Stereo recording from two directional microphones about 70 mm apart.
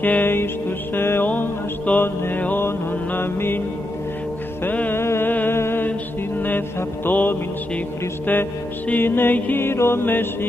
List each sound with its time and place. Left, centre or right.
0.0 s music: left
1.9 s mantra: left
4.6 s music: left
5.0 s music: left
5.3 s a sound: left
5.6 s mantra: left
7.1 s music: left